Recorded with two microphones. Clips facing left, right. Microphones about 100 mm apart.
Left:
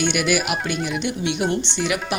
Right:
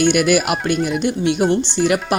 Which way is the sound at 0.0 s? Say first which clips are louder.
Right 6 dB; 50° right (ahead or behind).